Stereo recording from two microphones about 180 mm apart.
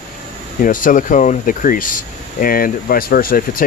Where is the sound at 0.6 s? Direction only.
50° left (ahead or behind).